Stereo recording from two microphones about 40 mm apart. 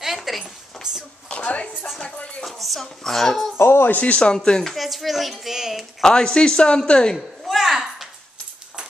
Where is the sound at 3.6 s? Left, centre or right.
Left.